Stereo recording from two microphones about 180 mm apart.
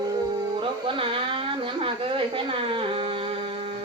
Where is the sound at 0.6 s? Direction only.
30° right (ahead or behind).